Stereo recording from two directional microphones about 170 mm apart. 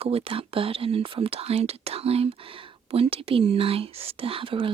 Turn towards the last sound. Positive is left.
turn(degrees=-30)  # may be behind; listen again after turning